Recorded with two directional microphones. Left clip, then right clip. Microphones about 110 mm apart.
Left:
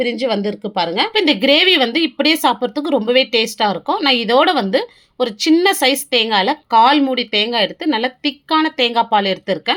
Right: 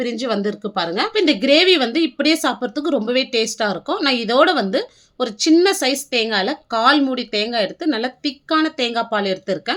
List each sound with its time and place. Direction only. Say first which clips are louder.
0.0 s speech: left 4 dB; 10° left (ahead or behind)